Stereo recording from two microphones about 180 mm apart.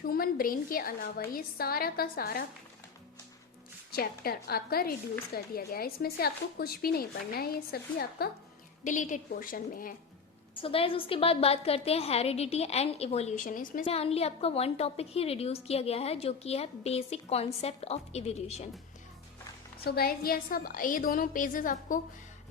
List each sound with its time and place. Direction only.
0.1 s speech: 55° left (ahead or behind)
3.9 s speech: 55° left (ahead or behind)
8.8 s a woman's voice: 45° left (ahead or behind)
10.5 s a woman's voice: 30° left (ahead or behind); by 13.8 s 50° left (ahead or behind)
13.8 s a woman's voice: 35° left (ahead or behind)
19.8 s a woman's voice: 60° left (ahead or behind)